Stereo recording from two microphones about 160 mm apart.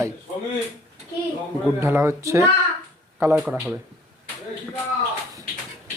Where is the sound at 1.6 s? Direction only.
15° right (ahead or behind).